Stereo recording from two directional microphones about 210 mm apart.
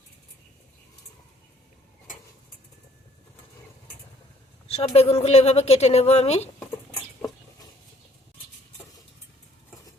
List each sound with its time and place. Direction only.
4.7 s a woman's voice: 30° left (ahead or behind)